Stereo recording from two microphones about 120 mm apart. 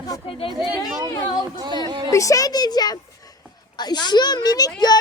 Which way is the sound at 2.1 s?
25° left (ahead or behind).